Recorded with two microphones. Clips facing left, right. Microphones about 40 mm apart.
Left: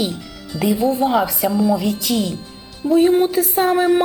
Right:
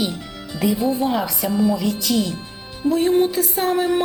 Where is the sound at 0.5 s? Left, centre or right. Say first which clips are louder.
Left 1 dB; right.